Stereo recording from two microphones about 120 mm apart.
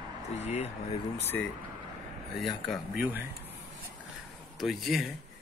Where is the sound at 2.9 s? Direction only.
15° right (ahead or behind).